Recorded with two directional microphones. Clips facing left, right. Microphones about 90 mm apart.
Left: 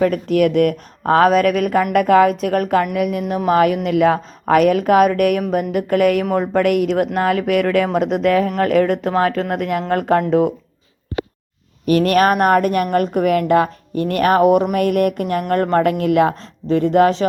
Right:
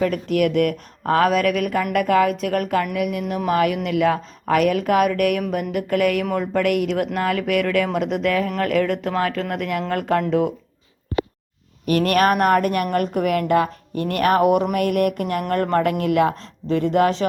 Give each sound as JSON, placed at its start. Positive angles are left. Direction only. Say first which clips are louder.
{"t": 0.0, "sound": "speech", "louder": "left 4 dB", "side_deg": 35}
{"t": 11.9, "sound": "speech", "louder": "left 3 dB", "side_deg": 25}